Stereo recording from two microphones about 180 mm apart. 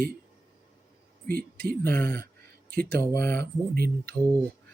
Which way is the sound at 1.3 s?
55° right (ahead or behind).